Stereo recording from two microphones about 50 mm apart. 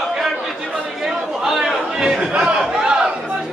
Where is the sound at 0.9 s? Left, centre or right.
Centre.